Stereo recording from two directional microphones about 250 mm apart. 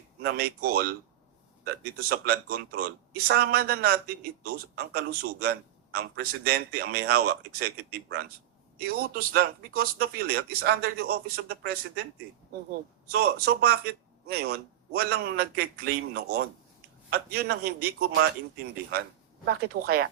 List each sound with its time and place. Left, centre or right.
0.2 s a man's voice: right
2.0 s a man's voice: right
13.1 s a man's voice: right
19.5 s a man's voice: right